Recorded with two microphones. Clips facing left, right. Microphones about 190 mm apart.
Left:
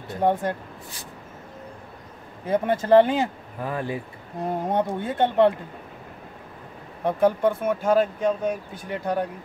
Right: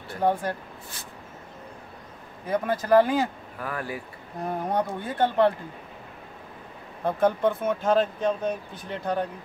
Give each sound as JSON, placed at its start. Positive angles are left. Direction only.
{"t": 0.1, "sound": "speech", "side_deg": 20}
{"t": 2.4, "sound": "speech", "side_deg": 25}
{"t": 7.1, "sound": "speech", "side_deg": 10}